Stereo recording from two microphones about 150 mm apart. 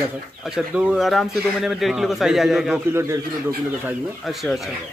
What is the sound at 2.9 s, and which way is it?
Speech, 20° right (ahead or behind).